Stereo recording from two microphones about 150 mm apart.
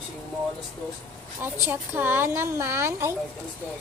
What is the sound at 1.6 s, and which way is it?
A woman's voice, 15° right (ahead or behind).